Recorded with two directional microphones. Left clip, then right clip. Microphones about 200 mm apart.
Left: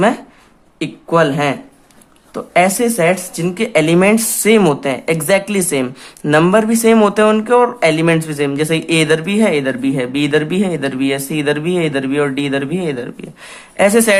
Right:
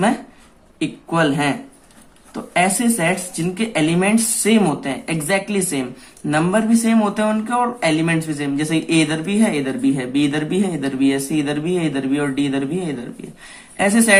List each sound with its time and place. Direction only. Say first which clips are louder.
0.8 s speech: left 5 dB; 40° left (ahead or behind)